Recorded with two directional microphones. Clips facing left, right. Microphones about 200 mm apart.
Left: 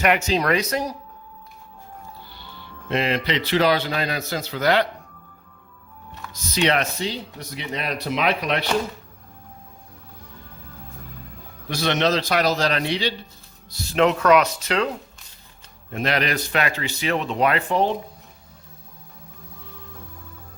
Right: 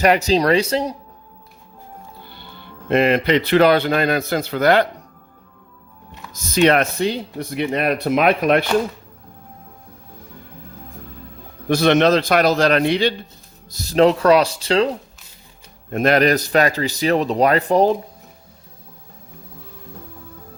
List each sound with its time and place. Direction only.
0.0 s speech: 35° right (ahead or behind)
2.3 s speech: 55° right (ahead or behind)
6.3 s speech: 50° right (ahead or behind)
11.7 s speech: 55° right (ahead or behind)
13.7 s speech: 40° right (ahead or behind)
15.9 s speech: 50° right (ahead or behind)